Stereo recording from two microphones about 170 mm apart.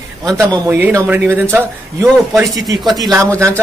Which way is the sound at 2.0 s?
Centre (ahead or behind).